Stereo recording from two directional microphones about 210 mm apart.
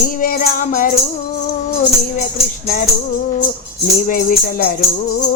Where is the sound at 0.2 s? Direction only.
40° left (ahead or behind).